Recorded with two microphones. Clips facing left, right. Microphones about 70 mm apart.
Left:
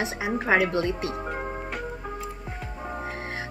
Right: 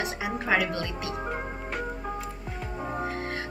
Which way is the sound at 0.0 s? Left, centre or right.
Left.